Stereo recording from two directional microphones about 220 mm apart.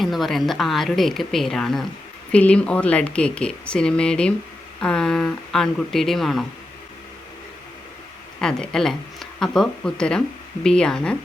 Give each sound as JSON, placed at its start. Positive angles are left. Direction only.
{"t": 0.0, "sound": "speech", "side_deg": 0}
{"t": 8.4, "sound": "speech", "side_deg": 5}